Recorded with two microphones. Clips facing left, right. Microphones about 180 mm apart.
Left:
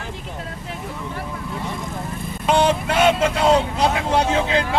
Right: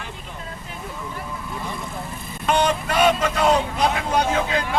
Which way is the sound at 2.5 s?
25° left (ahead or behind).